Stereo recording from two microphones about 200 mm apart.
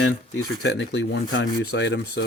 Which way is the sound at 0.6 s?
60° left (ahead or behind).